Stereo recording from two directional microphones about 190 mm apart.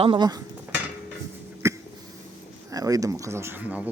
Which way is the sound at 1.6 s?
15° right (ahead or behind).